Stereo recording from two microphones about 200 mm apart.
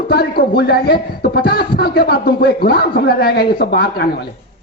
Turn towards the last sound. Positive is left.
turn(degrees=50)  # may be behind; listen again after turning